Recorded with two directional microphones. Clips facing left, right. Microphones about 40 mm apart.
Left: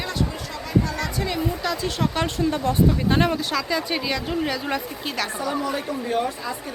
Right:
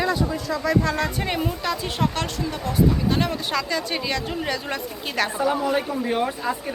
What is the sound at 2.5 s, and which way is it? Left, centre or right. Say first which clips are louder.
Speech: right 2 dB; left.